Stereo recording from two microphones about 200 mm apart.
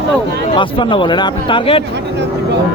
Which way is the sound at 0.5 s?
25° left (ahead or behind).